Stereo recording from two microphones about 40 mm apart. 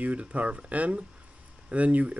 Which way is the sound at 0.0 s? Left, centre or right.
Right.